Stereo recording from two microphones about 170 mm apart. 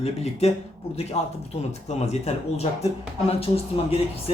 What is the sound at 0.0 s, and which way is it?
Speech, 40° left (ahead or behind).